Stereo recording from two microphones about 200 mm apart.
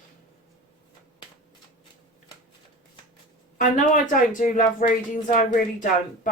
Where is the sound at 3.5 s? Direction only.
40° left (ahead or behind).